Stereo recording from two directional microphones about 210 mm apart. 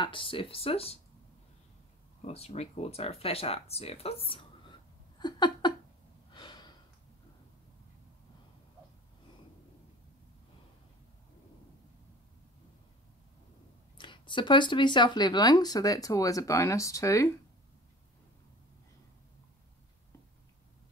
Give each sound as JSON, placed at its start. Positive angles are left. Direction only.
{"t": 0.0, "sound": "speech", "side_deg": 25}
{"t": 2.2, "sound": "speech", "side_deg": 30}
{"t": 5.2, "sound": "a sound", "side_deg": 20}
{"t": 6.3, "sound": "gasp", "side_deg": 20}
{"t": 13.9, "sound": "speech", "side_deg": 25}